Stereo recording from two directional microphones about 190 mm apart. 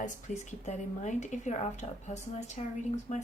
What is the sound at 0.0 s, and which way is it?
A woman's voice, 40° left (ahead or behind).